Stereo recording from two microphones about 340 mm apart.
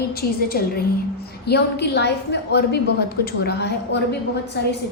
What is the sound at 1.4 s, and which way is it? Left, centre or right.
A woman's voice, left.